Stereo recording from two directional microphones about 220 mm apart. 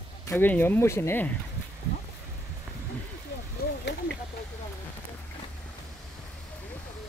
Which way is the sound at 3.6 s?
45° left (ahead or behind).